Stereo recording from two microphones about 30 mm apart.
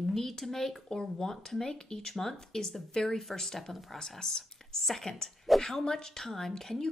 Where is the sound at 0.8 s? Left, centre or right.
Left.